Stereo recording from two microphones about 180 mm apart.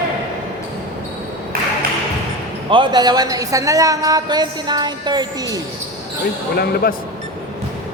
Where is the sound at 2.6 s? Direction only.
25° right (ahead or behind).